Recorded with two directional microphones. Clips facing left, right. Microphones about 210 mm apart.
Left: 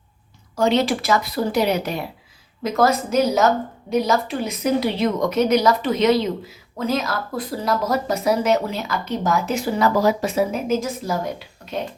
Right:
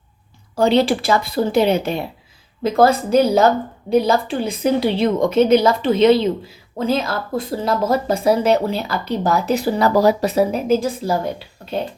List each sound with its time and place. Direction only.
0.5 s a woman's voice: 35° right (ahead or behind)